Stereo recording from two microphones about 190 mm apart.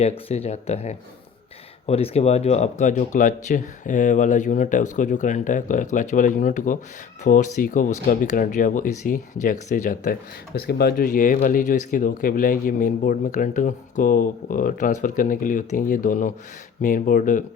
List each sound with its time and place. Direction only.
0.3 s speech: 35° left (ahead or behind)